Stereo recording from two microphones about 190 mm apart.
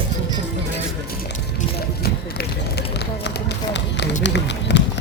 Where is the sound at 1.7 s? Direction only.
55° left (ahead or behind).